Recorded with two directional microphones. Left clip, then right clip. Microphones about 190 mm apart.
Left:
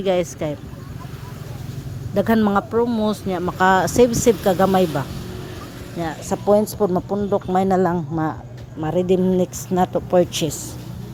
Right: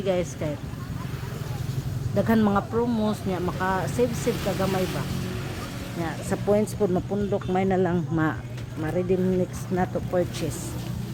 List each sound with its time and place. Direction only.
0.0 s speech: 50° left (ahead or behind)
2.1 s speech: 45° left (ahead or behind)
6.0 s speech: 25° left (ahead or behind)
8.1 s speech: centre (ahead or behind)
9.0 s speech: 45° left (ahead or behind)